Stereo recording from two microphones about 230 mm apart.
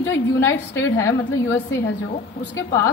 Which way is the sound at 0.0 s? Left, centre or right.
Centre.